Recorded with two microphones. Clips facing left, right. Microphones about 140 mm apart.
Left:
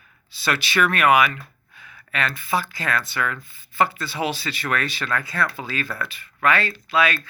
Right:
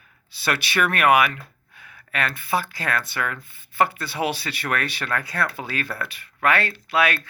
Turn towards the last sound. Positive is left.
turn(degrees=-65)  # may be behind; listen again after turning